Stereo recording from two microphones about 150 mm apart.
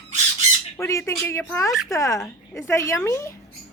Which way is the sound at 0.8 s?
20° left (ahead or behind).